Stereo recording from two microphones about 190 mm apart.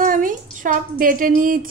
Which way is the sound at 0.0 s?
45° right (ahead or behind).